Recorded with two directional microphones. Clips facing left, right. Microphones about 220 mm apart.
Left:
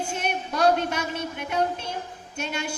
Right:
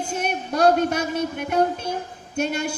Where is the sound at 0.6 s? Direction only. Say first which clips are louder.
Right 4 dB; 45° right (ahead or behind).